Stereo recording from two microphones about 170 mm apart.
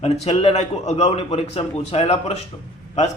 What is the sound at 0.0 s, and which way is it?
A man's voice, 35° left (ahead or behind).